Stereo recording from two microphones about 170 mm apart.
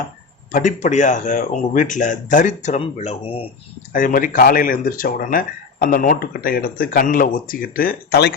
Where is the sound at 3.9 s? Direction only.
55° left (ahead or behind).